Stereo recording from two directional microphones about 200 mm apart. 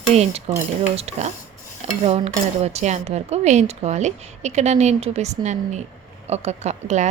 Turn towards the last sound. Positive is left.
turn(degrees=-35)  # may be behind; listen again after turning